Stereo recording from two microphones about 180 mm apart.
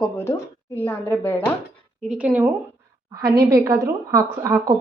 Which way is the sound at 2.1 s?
5° right (ahead or behind).